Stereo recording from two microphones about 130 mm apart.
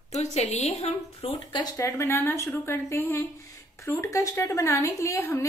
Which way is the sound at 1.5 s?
25° left (ahead or behind).